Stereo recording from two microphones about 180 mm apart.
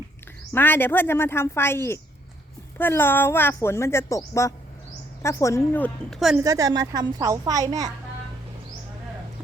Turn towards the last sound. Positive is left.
turn(degrees=-20)  # may be behind; listen again after turning